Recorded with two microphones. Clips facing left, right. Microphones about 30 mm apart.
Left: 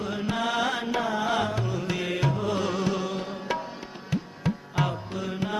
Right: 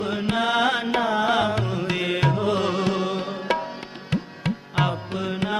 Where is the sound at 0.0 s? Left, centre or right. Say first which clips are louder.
Right 5 dB; right.